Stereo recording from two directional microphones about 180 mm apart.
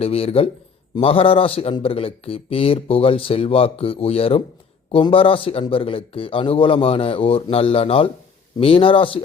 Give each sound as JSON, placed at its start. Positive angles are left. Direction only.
{"t": 0.0, "sound": "a man's voice", "side_deg": 35}